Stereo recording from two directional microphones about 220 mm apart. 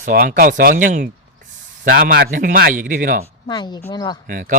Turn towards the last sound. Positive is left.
turn(degrees=-40)  # may be behind; listen again after turning